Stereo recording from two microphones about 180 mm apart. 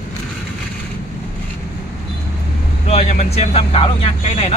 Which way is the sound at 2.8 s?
35° left (ahead or behind).